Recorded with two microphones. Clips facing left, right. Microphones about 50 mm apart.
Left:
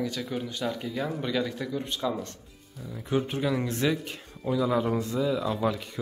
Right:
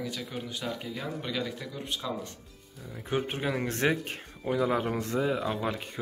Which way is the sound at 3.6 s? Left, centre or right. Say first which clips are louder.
Even; right.